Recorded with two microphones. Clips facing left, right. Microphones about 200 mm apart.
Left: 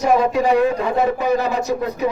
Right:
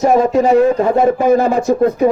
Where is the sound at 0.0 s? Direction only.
45° right (ahead or behind).